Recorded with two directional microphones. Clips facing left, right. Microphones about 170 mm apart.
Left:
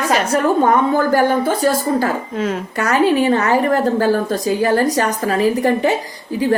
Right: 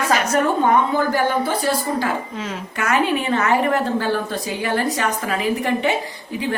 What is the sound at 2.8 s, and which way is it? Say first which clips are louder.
A woman's voice: left 5 dB; 35° left (ahead or behind).